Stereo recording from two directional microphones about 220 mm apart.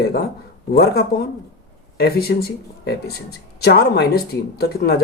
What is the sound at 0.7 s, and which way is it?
Speech, 45° left (ahead or behind).